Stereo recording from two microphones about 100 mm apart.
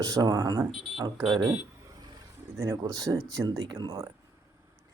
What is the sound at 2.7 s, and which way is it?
Speech, 40° right (ahead or behind).